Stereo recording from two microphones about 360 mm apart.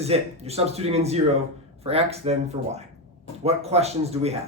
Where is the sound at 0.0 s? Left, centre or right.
Centre.